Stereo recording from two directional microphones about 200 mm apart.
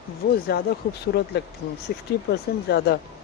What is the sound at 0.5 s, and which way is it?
Speech, 50° left (ahead or behind).